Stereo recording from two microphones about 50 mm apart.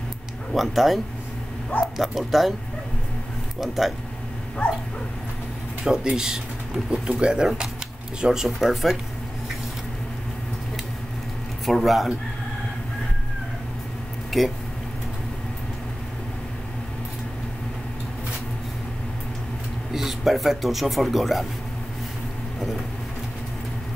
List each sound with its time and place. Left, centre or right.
0.6 s speech: centre
3.6 s speech: centre
5.9 s speech: centre
7.4 s speech: centre
11.6 s speech: centre
14.3 s speech: centre
19.9 s speech: centre